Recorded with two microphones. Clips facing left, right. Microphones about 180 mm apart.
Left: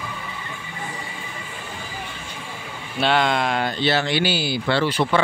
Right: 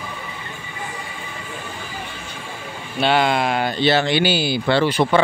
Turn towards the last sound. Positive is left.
turn(degrees=-15)  # may be behind; listen again after turning